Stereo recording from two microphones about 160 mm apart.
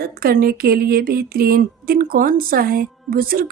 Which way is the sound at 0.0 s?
70° right (ahead or behind).